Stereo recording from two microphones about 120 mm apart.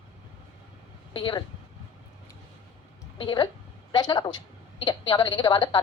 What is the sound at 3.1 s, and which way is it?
A woman's voice, 40° left (ahead or behind).